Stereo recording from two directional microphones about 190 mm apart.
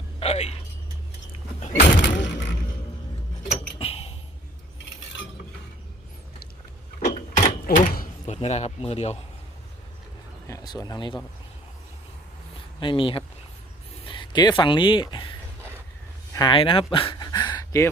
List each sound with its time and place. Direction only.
0.2 s speech: 35° left (ahead or behind)
1.6 s speech: 40° left (ahead or behind)
3.8 s a sound: 30° left (ahead or behind)
7.0 s door: 40° left (ahead or behind)
8.4 s speech: 35° left (ahead or behind)
10.4 s speech: 20° left (ahead or behind)
12.8 s speech: 25° left (ahead or behind)
14.0 s a sound: 25° left (ahead or behind)
14.6 s speech: 25° left (ahead or behind)
16.3 s a sound: 25° left (ahead or behind)